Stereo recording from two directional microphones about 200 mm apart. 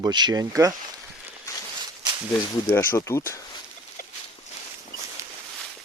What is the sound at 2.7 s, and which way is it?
Speech, 15° left (ahead or behind).